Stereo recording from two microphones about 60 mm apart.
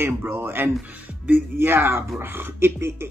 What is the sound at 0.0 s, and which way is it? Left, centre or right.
Speech, right.